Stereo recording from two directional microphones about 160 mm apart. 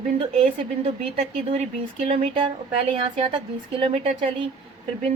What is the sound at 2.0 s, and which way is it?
Speech, 35° right (ahead or behind).